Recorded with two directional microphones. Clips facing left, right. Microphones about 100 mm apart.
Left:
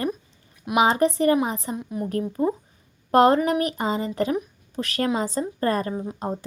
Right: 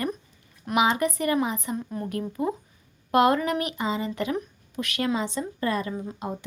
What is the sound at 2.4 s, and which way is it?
A woman's voice, 35° left (ahead or behind).